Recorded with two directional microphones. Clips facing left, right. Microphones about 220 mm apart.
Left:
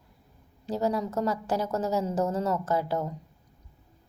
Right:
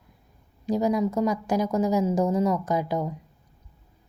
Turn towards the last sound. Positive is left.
turn(degrees=-15)  # may be behind; listen again after turning